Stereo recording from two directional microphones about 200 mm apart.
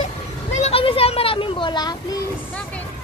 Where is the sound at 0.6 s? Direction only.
30° left (ahead or behind).